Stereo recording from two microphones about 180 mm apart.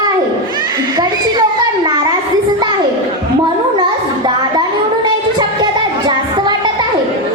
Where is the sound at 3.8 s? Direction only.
25° right (ahead or behind).